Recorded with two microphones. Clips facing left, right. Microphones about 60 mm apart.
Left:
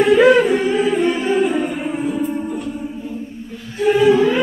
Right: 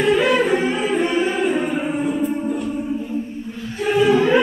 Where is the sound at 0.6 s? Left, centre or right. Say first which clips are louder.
Left 3 dB; right.